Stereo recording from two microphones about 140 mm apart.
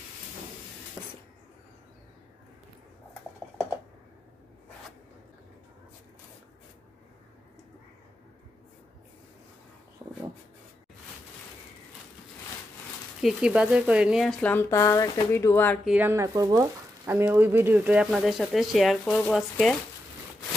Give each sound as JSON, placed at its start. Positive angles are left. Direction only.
{"t": 13.2, "sound": "speech", "side_deg": -10}
{"t": 14.4, "sound": "speech", "side_deg": 15}
{"t": 15.8, "sound": "speech", "side_deg": -5}
{"t": 16.1, "sound": "speech", "side_deg": -25}
{"t": 18.1, "sound": "speech", "side_deg": 0}